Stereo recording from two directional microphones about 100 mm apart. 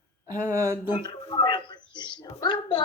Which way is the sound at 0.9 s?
45° left (ahead or behind).